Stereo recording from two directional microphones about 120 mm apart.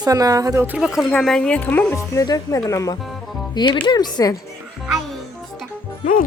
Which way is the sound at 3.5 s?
40° left (ahead or behind).